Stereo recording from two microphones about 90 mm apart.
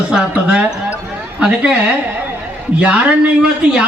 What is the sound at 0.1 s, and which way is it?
A man's voice, 10° right (ahead or behind).